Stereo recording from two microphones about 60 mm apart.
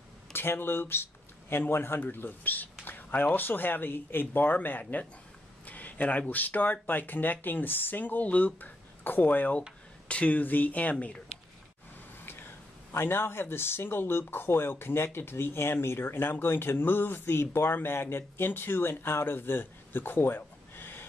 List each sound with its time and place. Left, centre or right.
0.3 s speech: left
12.3 s speech: left